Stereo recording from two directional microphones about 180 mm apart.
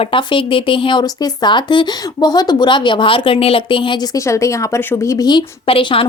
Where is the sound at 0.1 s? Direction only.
30° left (ahead or behind).